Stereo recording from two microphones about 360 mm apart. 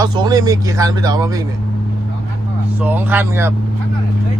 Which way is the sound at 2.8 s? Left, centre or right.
Centre.